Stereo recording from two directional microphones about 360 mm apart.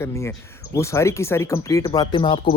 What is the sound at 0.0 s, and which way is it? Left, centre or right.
Speech, centre.